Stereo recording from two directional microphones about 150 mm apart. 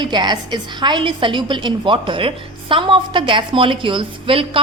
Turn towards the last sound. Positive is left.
turn(degrees=-35)  # may be behind; listen again after turning